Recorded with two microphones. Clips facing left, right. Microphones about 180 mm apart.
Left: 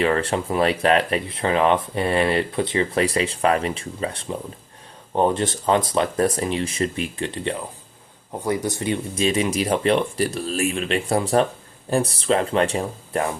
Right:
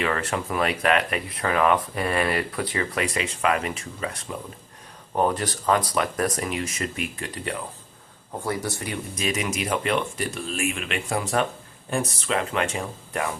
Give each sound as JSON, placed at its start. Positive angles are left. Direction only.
{"t": 0.0, "sound": "speech", "side_deg": 30}